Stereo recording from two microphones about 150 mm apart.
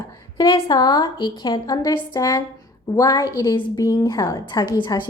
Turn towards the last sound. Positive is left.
turn(degrees=30)  # may be behind; listen again after turning